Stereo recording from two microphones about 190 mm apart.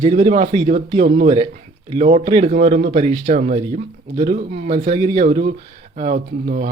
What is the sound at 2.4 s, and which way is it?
Speech, 40° right (ahead or behind).